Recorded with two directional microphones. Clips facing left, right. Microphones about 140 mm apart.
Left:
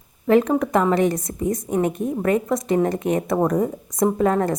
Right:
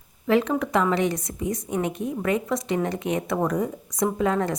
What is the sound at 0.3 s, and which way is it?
A woman's voice, 45° left (ahead or behind).